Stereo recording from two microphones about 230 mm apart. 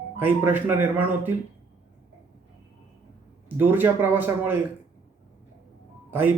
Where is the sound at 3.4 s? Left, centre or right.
Centre.